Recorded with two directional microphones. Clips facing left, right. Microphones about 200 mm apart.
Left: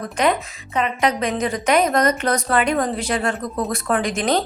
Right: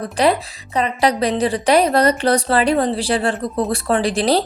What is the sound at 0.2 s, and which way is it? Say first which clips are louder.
A woman's voice: right 3 dB; 35° right (ahead or behind).